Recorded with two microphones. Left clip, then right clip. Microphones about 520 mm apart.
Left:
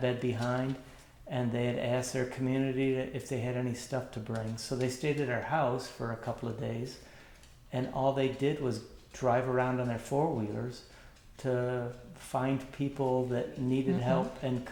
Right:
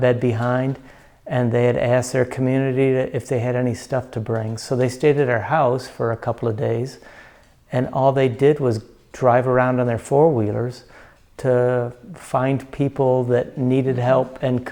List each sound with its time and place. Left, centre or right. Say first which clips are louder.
0.0 s speech: right 14 dB; right